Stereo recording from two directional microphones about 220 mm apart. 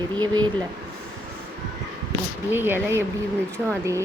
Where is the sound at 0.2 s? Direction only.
20° right (ahead or behind).